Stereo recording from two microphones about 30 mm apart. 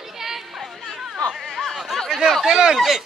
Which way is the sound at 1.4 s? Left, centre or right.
Centre.